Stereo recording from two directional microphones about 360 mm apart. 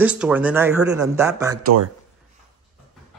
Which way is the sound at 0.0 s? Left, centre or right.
Centre.